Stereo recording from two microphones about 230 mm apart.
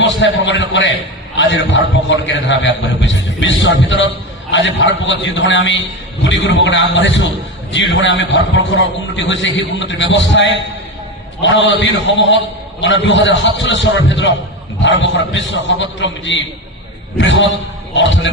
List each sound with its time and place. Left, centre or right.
0.2 s a man's voice: left